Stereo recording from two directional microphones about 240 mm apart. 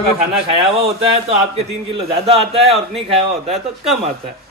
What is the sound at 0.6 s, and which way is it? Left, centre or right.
Speech, right.